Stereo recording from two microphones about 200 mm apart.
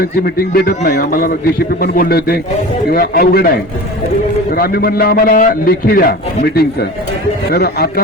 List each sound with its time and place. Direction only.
0.0 s a man's voice: 45° left (ahead or behind)
4.5 s a man's voice: 50° left (ahead or behind)